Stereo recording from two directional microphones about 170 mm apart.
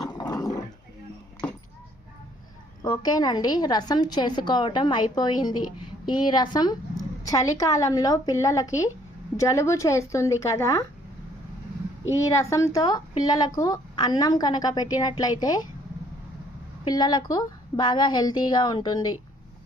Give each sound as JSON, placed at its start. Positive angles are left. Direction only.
{"t": 0.2, "sound": "dog", "side_deg": 20}
{"t": 2.8, "sound": "a woman's voice", "side_deg": 25}
{"t": 12.4, "sound": "a woman's voice", "side_deg": 20}
{"t": 16.8, "sound": "a woman's voice", "side_deg": 25}